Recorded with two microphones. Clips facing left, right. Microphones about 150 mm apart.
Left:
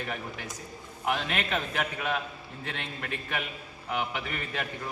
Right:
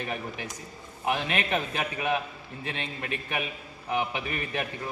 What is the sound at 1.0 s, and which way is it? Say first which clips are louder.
A man's voice: right 2 dB; 15° right (ahead or behind).